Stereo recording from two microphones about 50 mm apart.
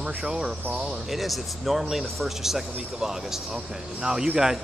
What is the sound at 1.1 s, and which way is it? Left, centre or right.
Speech, centre.